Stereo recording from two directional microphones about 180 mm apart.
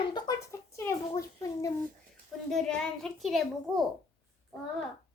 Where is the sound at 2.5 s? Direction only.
5° left (ahead or behind).